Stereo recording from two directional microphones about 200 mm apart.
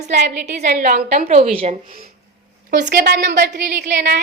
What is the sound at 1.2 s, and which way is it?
Speech, 30° right (ahead or behind).